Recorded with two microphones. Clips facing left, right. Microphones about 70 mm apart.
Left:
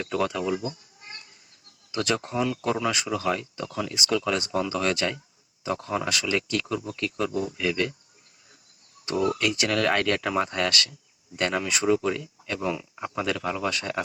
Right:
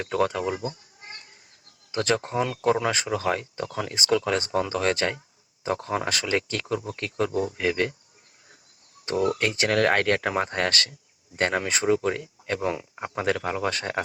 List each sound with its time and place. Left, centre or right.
0.0 s speech: right
1.9 s speech: right
9.0 s speech: right